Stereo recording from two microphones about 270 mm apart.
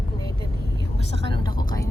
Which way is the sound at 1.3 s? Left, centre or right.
Centre.